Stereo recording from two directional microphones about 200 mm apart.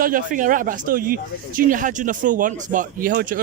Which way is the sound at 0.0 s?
45° right (ahead or behind).